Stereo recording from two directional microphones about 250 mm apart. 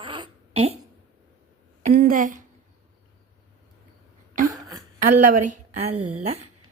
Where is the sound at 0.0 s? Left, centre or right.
Centre.